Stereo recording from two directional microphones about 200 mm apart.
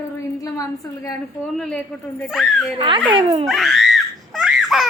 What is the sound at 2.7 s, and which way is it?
Speech, 25° right (ahead or behind).